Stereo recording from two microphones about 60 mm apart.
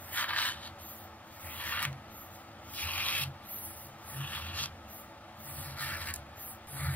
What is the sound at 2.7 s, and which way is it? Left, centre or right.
Sanding, left.